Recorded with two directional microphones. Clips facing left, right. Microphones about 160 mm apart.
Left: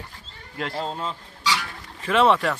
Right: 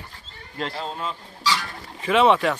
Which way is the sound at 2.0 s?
5° right (ahead or behind).